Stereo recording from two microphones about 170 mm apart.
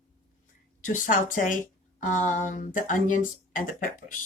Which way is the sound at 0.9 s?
50° left (ahead or behind).